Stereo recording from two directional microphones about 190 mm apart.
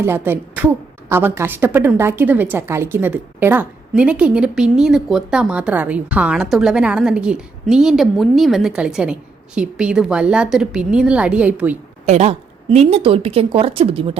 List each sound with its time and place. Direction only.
0.0 s a woman's voice: 10° right (ahead or behind)
12.0 s a woman's voice: 35° right (ahead or behind)